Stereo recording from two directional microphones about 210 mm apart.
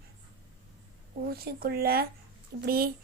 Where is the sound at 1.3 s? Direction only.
45° right (ahead or behind).